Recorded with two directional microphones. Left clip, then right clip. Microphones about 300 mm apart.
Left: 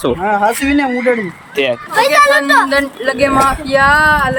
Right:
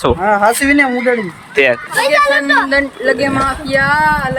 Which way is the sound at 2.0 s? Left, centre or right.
Left.